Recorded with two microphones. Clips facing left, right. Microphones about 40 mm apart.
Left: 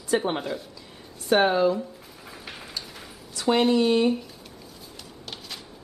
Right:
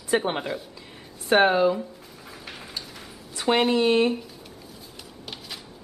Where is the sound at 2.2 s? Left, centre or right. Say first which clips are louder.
Even; centre.